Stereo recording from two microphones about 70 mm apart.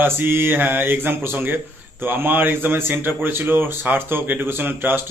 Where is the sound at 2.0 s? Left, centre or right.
Right.